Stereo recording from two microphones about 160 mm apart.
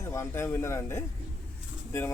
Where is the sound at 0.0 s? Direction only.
15° left (ahead or behind).